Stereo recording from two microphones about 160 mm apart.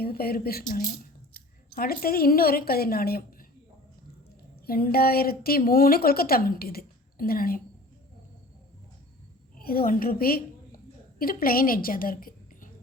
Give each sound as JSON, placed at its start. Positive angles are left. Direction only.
{"t": 0.0, "sound": "a woman's voice", "side_deg": 70}
{"t": 4.6, "sound": "a woman's voice", "side_deg": 70}
{"t": 9.6, "sound": "a woman's voice", "side_deg": 65}